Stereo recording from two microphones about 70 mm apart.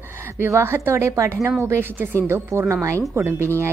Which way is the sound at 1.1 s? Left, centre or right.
Right.